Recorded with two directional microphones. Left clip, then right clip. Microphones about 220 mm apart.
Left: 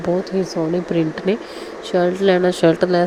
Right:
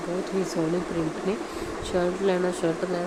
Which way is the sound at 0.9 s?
30° left (ahead or behind).